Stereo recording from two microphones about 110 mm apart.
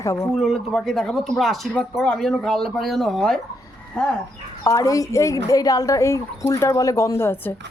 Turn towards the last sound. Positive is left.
turn(degrees=25)  # may be behind; listen again after turning